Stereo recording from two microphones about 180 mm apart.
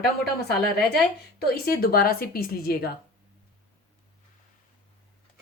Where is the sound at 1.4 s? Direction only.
55° left (ahead or behind).